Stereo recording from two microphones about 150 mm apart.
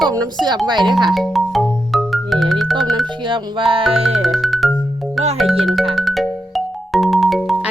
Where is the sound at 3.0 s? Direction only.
30° right (ahead or behind).